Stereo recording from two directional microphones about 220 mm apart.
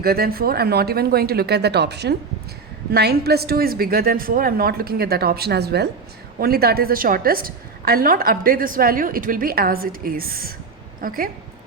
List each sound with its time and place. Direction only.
0.0 s a woman's voice: 45° right (ahead or behind)